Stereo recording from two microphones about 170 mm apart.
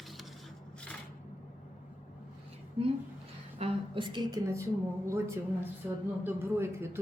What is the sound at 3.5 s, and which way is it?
A woman's voice, 30° right (ahead or behind).